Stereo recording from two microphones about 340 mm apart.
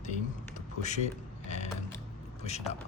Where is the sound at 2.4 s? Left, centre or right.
Centre.